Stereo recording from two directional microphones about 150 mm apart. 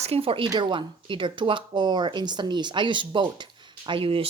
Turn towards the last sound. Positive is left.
turn(degrees=-35)  # may be behind; listen again after turning